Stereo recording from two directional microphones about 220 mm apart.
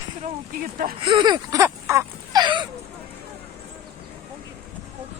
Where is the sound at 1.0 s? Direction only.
20° right (ahead or behind).